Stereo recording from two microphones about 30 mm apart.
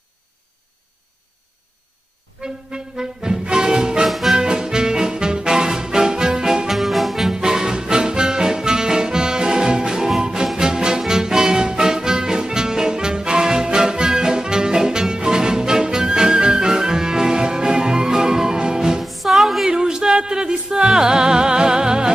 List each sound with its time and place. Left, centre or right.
2.4 s music: right
4.1 s music: centre
4.4 s music: right
6.7 s music: centre
7.4 s music: right
19.0 s music: centre
19.7 s music: right